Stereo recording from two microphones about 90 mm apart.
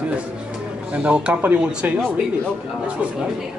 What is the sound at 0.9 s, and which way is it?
A man's voice, 15° right (ahead or behind).